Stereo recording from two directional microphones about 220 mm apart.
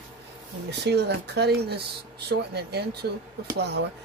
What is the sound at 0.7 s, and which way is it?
Speech, 50° right (ahead or behind).